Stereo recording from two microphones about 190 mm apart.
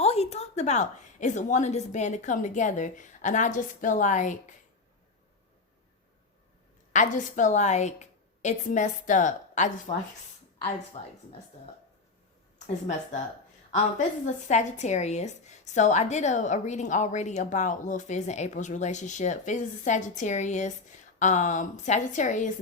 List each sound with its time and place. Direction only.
0.0 s a woman's voice: 35° left (ahead or behind)
6.9 s a woman's voice: 40° left (ahead or behind)
10.6 s speech: 30° left (ahead or behind)
12.5 s speech: 35° left (ahead or behind)
14.3 s a woman's voice: 40° left (ahead or behind)